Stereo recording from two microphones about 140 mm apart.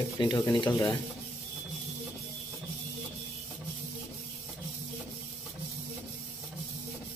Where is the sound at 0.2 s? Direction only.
30° left (ahead or behind).